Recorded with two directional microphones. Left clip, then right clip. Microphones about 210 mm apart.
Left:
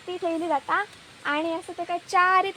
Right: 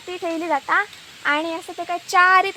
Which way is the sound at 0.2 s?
45° right (ahead or behind).